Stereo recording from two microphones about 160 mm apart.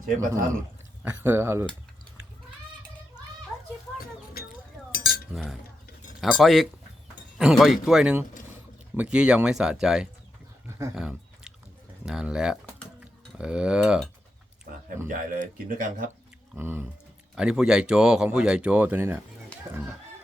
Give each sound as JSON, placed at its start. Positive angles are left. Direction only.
{"t": 1.2, "sound": "speech", "side_deg": -15}
{"t": 4.9, "sound": "cutlery", "side_deg": 65}
{"t": 5.3, "sound": "speech", "side_deg": 0}
{"t": 10.9, "sound": "chewing", "side_deg": -5}
{"t": 12.0, "sound": "speech", "side_deg": -5}
{"t": 14.7, "sound": "a sound", "side_deg": -60}
{"t": 15.0, "sound": "speech", "side_deg": -55}
{"t": 16.6, "sound": "speech", "side_deg": -15}